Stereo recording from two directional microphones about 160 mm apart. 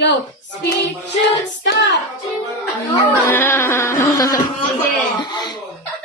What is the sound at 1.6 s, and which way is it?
Speech, 90° left.